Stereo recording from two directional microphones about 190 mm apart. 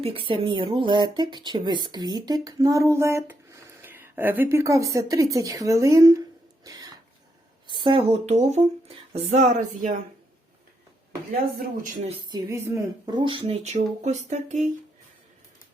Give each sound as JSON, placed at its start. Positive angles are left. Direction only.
{"t": 0.0, "sound": "speech", "side_deg": -30}
{"t": 6.7, "sound": "cough", "side_deg": -20}
{"t": 7.7, "sound": "speech", "side_deg": -25}
{"t": 11.8, "sound": "speech", "side_deg": -40}
{"t": 12.3, "sound": "speech", "side_deg": -15}
{"t": 13.4, "sound": "speech", "side_deg": -35}